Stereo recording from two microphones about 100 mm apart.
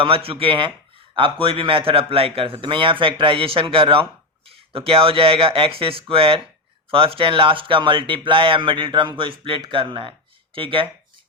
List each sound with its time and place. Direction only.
0.0 s a man's voice: 70° right (ahead or behind)
9.6 s speech: 50° right (ahead or behind)